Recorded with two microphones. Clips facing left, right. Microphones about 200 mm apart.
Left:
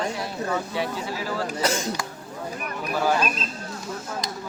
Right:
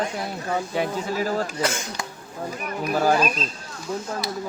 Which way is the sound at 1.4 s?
35° left (ahead or behind).